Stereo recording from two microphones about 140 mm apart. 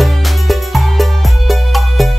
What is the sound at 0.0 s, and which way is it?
Music, centre (ahead or behind).